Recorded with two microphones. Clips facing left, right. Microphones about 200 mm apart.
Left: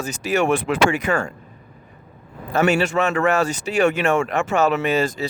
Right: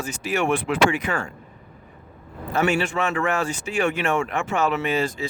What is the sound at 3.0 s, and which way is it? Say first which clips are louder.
Speech: left 5 dB; 55° left (ahead or behind).